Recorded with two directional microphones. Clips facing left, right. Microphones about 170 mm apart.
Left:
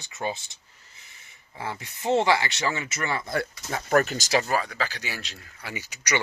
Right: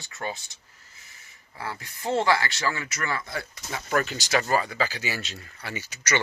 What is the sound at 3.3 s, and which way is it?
Speech, 50° left (ahead or behind).